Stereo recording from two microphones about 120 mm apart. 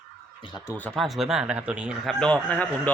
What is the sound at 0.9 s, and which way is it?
Speech, centre (ahead or behind).